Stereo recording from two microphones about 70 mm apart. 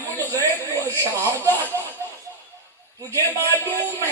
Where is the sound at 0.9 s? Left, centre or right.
Right.